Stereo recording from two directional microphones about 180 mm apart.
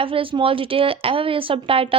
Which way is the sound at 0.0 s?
30° right (ahead or behind).